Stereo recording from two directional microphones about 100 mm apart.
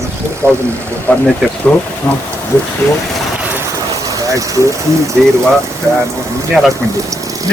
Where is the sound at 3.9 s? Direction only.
35° right (ahead or behind).